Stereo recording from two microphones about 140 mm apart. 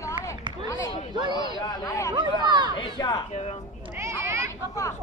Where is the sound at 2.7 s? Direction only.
30° left (ahead or behind).